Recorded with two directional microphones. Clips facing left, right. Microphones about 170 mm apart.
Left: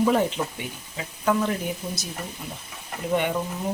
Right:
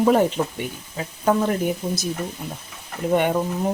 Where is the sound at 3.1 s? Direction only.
45° right (ahead or behind).